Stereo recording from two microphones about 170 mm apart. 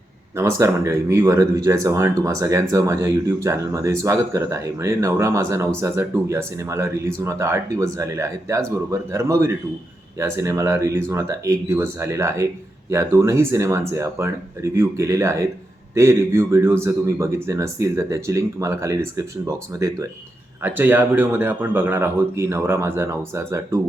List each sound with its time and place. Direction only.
0.3 s speech: 15° right (ahead or behind)